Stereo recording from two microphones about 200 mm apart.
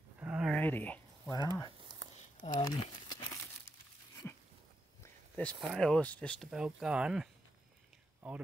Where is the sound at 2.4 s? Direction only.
30° left (ahead or behind).